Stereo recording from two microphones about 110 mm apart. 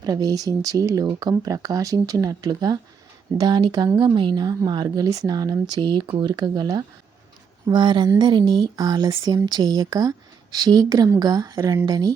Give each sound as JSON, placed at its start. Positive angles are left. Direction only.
{"t": 0.0, "sound": "speech", "side_deg": -35}
{"t": 7.7, "sound": "a sound", "side_deg": -45}
{"t": 8.2, "sound": "speech", "side_deg": -40}